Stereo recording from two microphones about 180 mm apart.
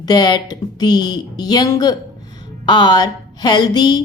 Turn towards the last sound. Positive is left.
turn(degrees=20)  # may be behind; listen again after turning